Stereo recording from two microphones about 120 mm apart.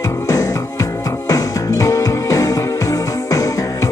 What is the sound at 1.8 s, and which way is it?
Music, 30° left (ahead or behind).